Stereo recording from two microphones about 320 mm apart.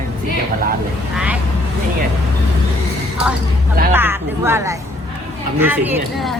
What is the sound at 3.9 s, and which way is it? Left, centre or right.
Speech, centre.